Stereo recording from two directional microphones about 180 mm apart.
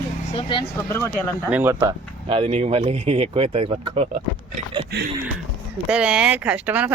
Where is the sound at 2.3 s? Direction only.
30° right (ahead or behind).